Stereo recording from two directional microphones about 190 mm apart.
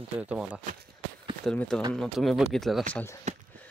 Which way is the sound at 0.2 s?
5° right (ahead or behind).